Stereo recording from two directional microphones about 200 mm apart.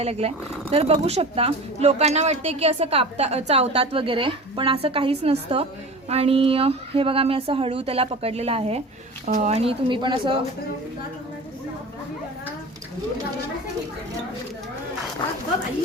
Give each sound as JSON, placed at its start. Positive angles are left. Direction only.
{"t": 0.0, "sound": "speech", "side_deg": -30}